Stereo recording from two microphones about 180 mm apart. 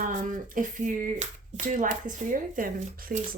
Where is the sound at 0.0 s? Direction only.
45° right (ahead or behind).